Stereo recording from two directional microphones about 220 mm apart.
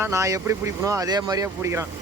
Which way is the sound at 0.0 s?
15° right (ahead or behind).